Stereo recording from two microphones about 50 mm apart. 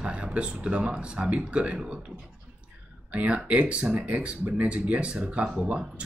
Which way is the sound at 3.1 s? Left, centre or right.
Right.